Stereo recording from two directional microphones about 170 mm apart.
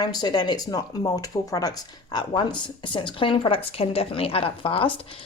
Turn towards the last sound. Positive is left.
turn(degrees=30)  # may be behind; listen again after turning